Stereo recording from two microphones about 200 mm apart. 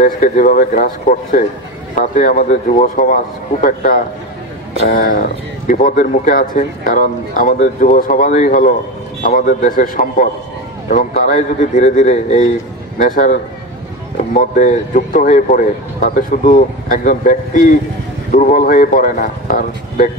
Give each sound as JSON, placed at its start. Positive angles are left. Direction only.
{"t": 0.0, "sound": "a man's voice", "side_deg": 45}